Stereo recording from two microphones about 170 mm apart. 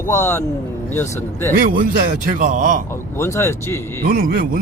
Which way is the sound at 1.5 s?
55° right (ahead or behind).